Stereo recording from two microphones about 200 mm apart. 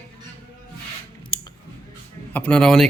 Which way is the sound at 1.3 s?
25° left (ahead or behind).